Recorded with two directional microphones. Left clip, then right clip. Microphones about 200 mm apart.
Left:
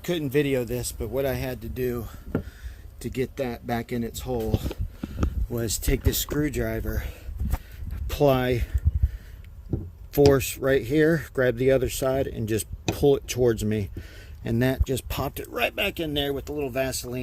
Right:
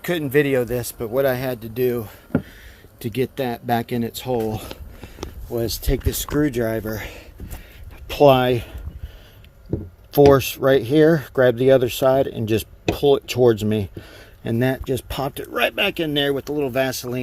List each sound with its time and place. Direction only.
0.0 s speech: 15° left (ahead or behind)
5.5 s speech: 20° left (ahead or behind)
6.4 s speech: 5° left (ahead or behind)
8.1 s speech: 10° left (ahead or behind)
10.3 s speech: 10° left (ahead or behind); by 17.2 s 10° right (ahead or behind)